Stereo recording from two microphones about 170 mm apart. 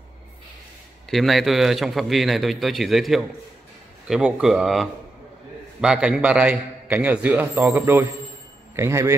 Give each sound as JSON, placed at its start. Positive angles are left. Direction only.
{"t": 1.1, "sound": "a man's voice", "side_deg": 0}